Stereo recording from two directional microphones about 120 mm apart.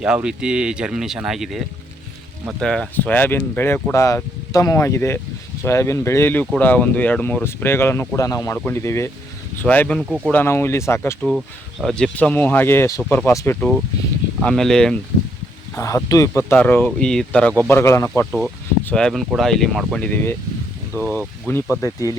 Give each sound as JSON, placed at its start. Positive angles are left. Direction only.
{"t": 0.0, "sound": "speech", "side_deg": -5}
{"t": 8.5, "sound": "speech", "side_deg": 15}
{"t": 9.6, "sound": "speech", "side_deg": 10}
{"t": 10.0, "sound": "speech", "side_deg": -5}
{"t": 10.3, "sound": "speech", "side_deg": 20}
{"t": 11.2, "sound": "speech", "side_deg": 0}
{"t": 13.6, "sound": "speech", "side_deg": 5}
{"t": 15.8, "sound": "speech", "side_deg": 25}
{"t": 17.7, "sound": "speech", "side_deg": 20}
{"t": 18.3, "sound": "speech", "side_deg": 0}
{"t": 20.9, "sound": "speech", "side_deg": -20}
{"t": 21.4, "sound": "speech", "side_deg": 20}